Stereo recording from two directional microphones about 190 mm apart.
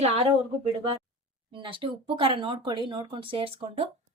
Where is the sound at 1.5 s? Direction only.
25° right (ahead or behind).